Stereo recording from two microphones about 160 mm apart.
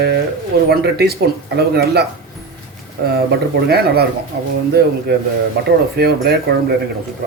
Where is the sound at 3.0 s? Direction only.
80° right.